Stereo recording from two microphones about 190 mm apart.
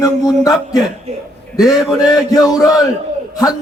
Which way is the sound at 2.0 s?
20° left (ahead or behind).